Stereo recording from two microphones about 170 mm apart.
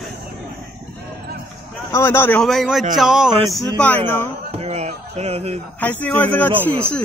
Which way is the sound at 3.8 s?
10° left (ahead or behind).